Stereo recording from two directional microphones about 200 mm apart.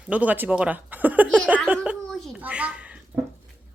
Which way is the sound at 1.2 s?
5° left (ahead or behind).